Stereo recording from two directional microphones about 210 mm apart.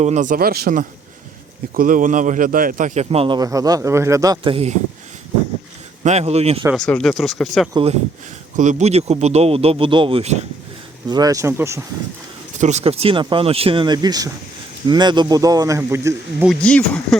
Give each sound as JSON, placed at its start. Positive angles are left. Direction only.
{"t": 0.0, "sound": "a man's voice", "side_deg": -35}
{"t": 6.0, "sound": "a man's voice", "side_deg": -30}
{"t": 6.7, "sound": "speech", "side_deg": 5}
{"t": 7.7, "sound": "a man's voice", "side_deg": -25}
{"t": 11.1, "sound": "speech", "side_deg": -15}
{"t": 12.5, "sound": "a man's voice", "side_deg": -35}
{"t": 16.5, "sound": "speech", "side_deg": 5}